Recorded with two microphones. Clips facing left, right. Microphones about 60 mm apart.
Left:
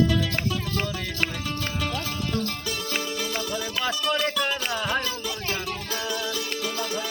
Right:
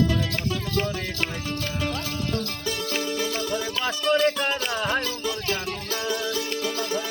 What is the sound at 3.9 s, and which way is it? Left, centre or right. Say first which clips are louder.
Music: right 4 dB; right.